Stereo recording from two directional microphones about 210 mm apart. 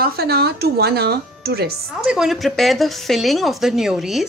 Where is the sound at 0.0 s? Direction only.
50° right (ahead or behind).